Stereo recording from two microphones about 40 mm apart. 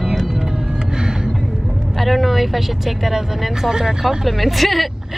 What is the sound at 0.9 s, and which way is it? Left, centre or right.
Music, centre.